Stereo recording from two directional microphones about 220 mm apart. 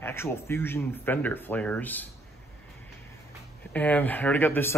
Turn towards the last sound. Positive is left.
turn(degrees=10)  # may be behind; listen again after turning